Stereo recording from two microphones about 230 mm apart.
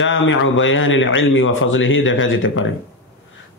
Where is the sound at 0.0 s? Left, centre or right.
Left.